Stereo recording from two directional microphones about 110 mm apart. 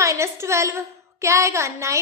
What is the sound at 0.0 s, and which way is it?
A woman's voice, 25° right (ahead or behind).